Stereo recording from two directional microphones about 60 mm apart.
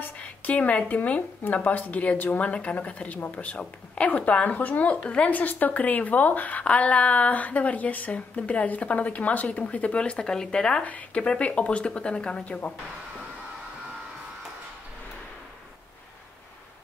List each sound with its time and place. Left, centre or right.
0.2 s speech: left
10.8 s speech: left